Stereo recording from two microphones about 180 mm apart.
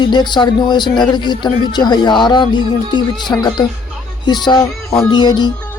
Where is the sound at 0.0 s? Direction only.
25° left (ahead or behind).